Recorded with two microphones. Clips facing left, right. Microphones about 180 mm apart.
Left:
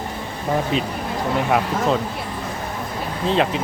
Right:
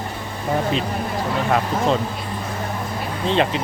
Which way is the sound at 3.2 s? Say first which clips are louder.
Even; centre (ahead or behind).